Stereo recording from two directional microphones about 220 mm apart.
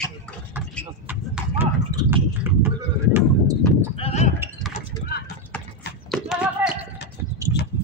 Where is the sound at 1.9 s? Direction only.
15° right (ahead or behind).